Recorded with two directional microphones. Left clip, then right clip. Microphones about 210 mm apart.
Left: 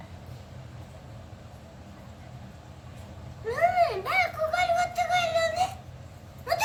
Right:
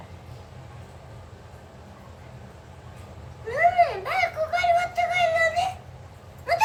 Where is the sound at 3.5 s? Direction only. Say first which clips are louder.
Right 3 dB; 15° right (ahead or behind).